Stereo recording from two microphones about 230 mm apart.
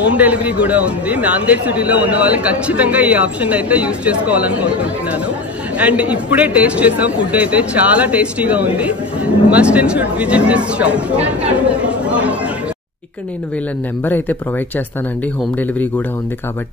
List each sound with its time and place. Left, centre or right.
0.1 s speech: centre
5.8 s speech: centre